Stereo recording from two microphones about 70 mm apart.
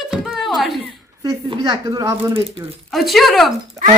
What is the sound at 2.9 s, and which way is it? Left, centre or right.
Speech, centre.